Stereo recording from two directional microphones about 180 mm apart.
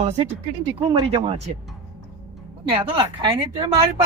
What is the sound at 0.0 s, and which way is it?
Speech, 30° right (ahead or behind).